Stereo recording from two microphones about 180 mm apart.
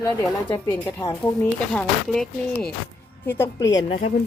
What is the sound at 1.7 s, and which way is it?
Speech, 5° left (ahead or behind).